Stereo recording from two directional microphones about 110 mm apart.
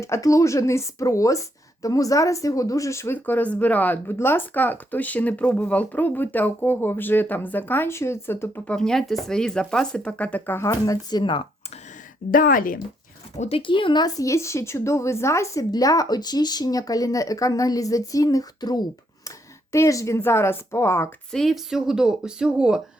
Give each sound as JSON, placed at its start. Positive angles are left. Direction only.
{"t": 0.0, "sound": "speech", "side_deg": 25}
{"t": 8.7, "sound": "speech", "side_deg": 5}
{"t": 10.7, "sound": "a woman's voice", "side_deg": 30}
{"t": 11.2, "sound": "speech", "side_deg": 45}
{"t": 13.3, "sound": "speech", "side_deg": 90}
{"t": 13.6, "sound": "speech", "side_deg": 50}
{"t": 14.3, "sound": "a woman's voice", "side_deg": 25}
{"t": 21.3, "sound": "speech", "side_deg": 0}